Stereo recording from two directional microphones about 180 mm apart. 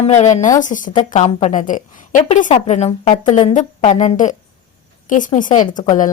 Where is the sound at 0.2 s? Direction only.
40° left (ahead or behind).